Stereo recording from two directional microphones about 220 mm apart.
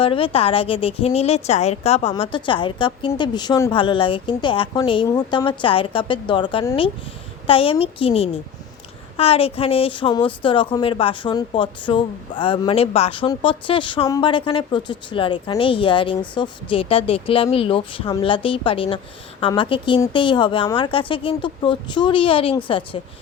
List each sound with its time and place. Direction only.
0.0 s a woman's voice: 25° left (ahead or behind)